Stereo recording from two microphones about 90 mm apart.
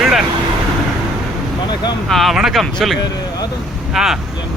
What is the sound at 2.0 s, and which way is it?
Speech, centre (ahead or behind).